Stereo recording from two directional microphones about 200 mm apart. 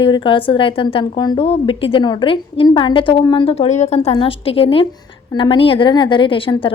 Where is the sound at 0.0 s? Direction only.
25° left (ahead or behind).